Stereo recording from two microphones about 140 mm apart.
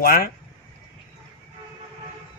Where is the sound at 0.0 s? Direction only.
90° left.